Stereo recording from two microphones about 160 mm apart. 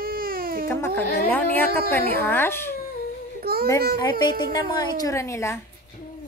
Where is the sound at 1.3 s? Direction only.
10° left (ahead or behind).